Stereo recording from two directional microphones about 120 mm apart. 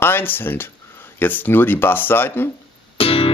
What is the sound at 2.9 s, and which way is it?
Music, 50° left (ahead or behind).